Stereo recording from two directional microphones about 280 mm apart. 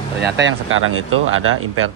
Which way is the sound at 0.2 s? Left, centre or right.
Right.